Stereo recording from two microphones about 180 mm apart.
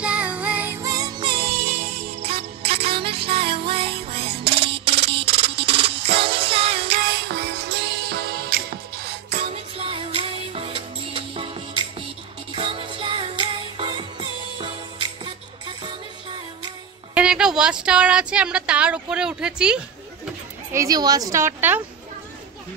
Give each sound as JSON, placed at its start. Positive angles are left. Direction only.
{"t": 0.0, "sound": "music", "side_deg": -5}
{"t": 7.2, "sound": "music", "side_deg": -70}
{"t": 8.1, "sound": "music", "side_deg": -60}
{"t": 9.3, "sound": "music", "side_deg": -35}
{"t": 17.1, "sound": "a sound", "side_deg": -5}
{"t": 20.7, "sound": "a woman's voice", "side_deg": -20}